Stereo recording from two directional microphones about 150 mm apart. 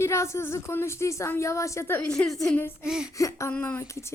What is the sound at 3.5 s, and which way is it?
Speech, 10° left (ahead or behind).